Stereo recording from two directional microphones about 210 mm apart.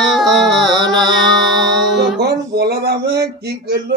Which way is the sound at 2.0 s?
50° right (ahead or behind).